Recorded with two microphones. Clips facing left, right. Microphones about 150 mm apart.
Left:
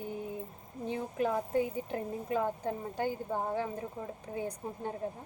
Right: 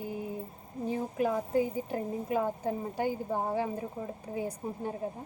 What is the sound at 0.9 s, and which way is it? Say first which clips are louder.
Speech: right 2 dB; 5° right (ahead or behind).